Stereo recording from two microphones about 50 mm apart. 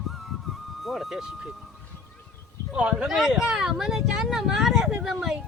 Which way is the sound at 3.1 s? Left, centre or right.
Centre.